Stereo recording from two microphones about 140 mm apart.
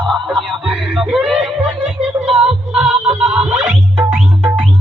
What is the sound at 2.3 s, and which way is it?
Music, 5° right (ahead or behind).